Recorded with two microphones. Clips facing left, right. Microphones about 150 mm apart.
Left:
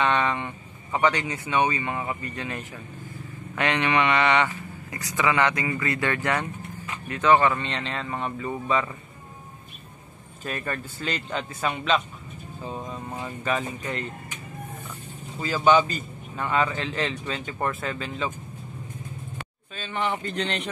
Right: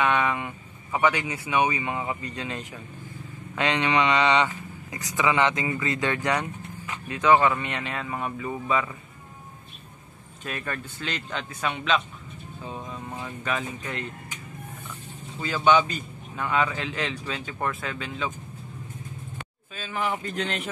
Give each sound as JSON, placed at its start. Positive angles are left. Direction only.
{"t": 0.0, "sound": "a sound", "side_deg": -5}
{"t": 0.9, "sound": "speech", "side_deg": -5}
{"t": 10.4, "sound": "a man's voice", "side_deg": 0}
{"t": 15.3, "sound": "a man's voice", "side_deg": 0}
{"t": 19.7, "sound": "a man's voice", "side_deg": -5}